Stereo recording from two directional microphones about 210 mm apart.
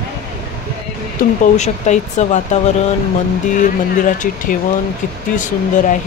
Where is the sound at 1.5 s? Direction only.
35° left (ahead or behind).